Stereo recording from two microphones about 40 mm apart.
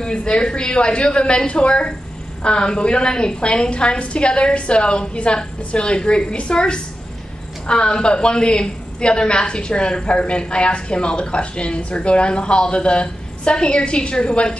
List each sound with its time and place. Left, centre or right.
0.0 s a woman's voice: left